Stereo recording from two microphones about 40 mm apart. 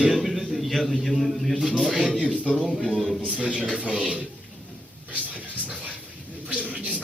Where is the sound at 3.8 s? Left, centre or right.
Right.